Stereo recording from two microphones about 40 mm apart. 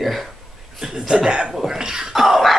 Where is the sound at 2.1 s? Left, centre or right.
Centre.